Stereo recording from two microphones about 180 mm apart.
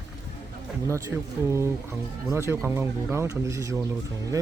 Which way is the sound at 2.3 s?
15° right (ahead or behind).